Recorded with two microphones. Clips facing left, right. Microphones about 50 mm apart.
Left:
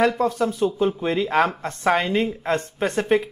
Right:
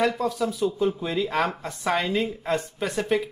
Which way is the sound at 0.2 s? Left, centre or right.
Left.